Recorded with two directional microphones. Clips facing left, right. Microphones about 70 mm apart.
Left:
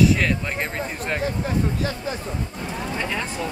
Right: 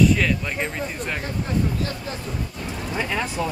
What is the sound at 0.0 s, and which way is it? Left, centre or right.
Speech, centre.